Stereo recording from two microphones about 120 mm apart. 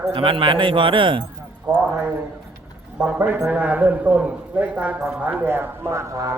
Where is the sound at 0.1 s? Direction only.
45° right (ahead or behind).